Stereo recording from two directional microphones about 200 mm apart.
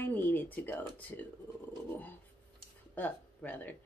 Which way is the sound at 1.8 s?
10° left (ahead or behind).